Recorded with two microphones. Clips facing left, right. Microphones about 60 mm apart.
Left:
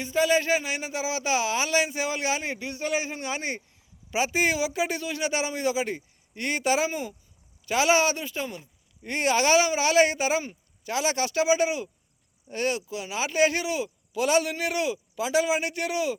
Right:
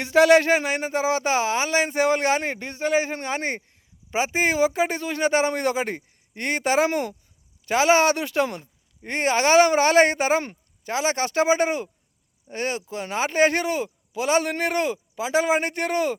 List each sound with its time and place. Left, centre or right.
0.0 s speech: right
6.8 s speech: right
7.6 s speech: right
8.1 s speech: right
9.0 s speech: right
12.5 s speech: right
14.1 s a man's voice: right
14.5 s speech: right